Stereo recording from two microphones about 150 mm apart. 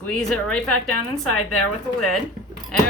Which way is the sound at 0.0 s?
5° left (ahead or behind).